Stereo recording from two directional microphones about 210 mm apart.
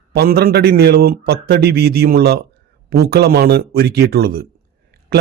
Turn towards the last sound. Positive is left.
turn(degrees=-45)  # may be behind; listen again after turning